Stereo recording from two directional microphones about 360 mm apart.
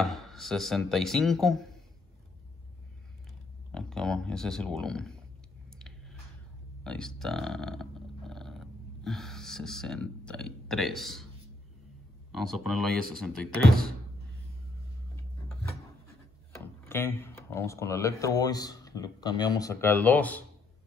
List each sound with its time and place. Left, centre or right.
0.0 s speech: centre
3.7 s speech: centre
5.7 s a sound: centre
6.8 s speech: centre
12.3 s speech: centre
15.1 s a sound: centre
16.8 s speech: centre